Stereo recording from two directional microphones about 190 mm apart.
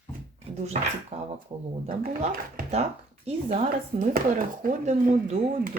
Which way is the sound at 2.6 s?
35° right (ahead or behind).